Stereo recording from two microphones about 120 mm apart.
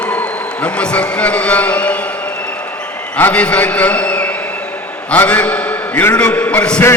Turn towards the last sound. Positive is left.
turn(degrees=10)  # may be behind; listen again after turning